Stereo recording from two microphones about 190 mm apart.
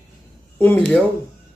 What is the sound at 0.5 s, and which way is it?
Speech, 5° left (ahead or behind).